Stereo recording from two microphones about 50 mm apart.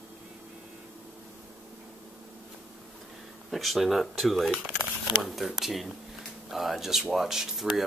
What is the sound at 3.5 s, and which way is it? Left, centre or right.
Speech, centre.